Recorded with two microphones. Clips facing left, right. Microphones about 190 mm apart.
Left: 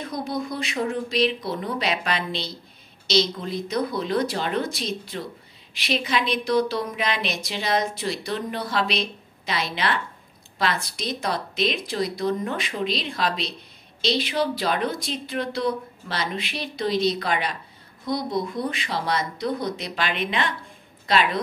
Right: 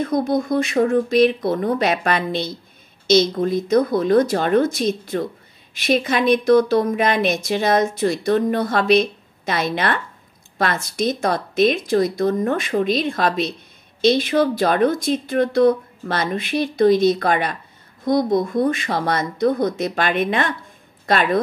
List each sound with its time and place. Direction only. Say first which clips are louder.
0.0 s speech: right 9 dB; 50° right (ahead or behind)